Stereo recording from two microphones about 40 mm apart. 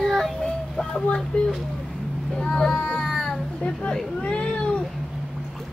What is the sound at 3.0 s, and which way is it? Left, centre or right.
Baby cry, centre.